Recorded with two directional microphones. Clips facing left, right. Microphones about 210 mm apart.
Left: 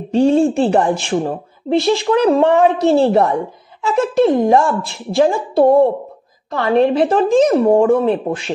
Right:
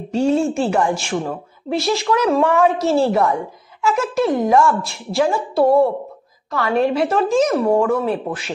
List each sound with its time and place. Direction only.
0.1 s a woman's voice: 30° left (ahead or behind)
3.1 s a woman's voice: 30° left (ahead or behind)